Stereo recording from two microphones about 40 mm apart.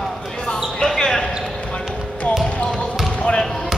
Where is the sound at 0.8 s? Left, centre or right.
Centre.